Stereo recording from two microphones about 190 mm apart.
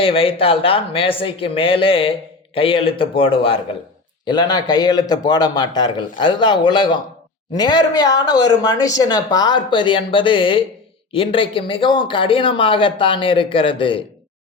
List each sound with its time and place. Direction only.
0.0 s speech: 30° left (ahead or behind)